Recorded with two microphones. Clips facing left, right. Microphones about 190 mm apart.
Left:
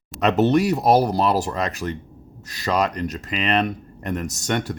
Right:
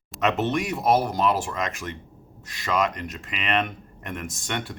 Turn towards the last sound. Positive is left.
turn(degrees=40)  # may be behind; listen again after turning